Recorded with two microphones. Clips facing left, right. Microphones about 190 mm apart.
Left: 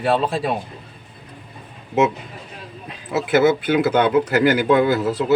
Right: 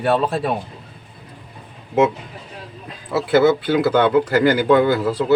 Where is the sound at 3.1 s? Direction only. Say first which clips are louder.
Right 1 dB; 20° left (ahead or behind).